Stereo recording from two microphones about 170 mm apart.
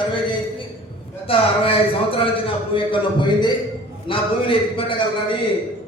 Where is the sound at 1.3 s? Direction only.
30° left (ahead or behind).